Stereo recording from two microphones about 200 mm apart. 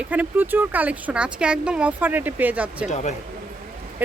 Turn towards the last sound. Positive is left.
turn(degrees=35)  # may be behind; listen again after turning